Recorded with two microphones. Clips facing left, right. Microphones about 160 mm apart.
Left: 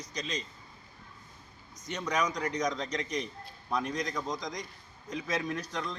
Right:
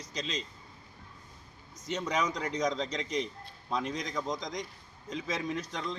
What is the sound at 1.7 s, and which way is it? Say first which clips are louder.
A man's voice: right 1 dB; 25° right (ahead or behind).